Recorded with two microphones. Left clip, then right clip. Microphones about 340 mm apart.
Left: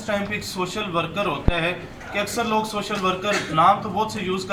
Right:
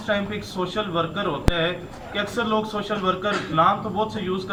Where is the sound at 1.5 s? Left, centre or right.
Right.